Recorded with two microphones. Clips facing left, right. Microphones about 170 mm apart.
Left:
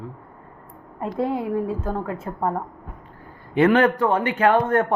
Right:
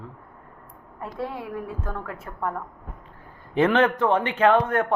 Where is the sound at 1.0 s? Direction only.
25° left (ahead or behind).